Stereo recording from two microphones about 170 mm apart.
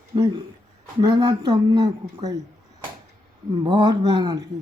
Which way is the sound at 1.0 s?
25° right (ahead or behind).